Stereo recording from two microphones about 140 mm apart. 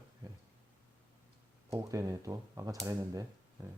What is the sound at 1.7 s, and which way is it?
Speech, 25° right (ahead or behind).